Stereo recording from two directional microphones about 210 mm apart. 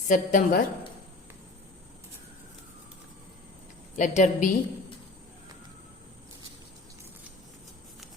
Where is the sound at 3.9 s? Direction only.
35° left (ahead or behind).